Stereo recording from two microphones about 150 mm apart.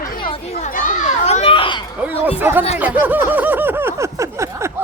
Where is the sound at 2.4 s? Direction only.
15° right (ahead or behind).